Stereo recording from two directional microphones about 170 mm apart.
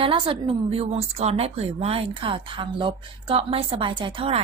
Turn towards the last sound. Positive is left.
turn(degrees=-35)  # may be behind; listen again after turning